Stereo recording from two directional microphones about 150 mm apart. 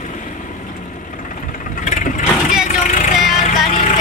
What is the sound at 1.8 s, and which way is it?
Vehicle, 60° left (ahead or behind).